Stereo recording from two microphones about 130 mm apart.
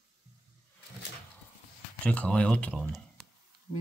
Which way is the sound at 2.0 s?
10° left (ahead or behind).